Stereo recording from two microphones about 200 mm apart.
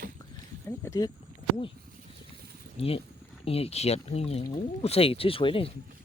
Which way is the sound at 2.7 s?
30° left (ahead or behind).